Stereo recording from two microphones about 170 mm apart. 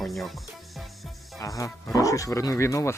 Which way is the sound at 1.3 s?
20° left (ahead or behind).